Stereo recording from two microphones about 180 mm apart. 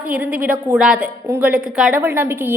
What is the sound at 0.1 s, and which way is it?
A woman's voice, 10° right (ahead or behind).